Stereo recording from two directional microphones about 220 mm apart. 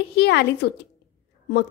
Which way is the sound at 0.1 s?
50° left (ahead or behind).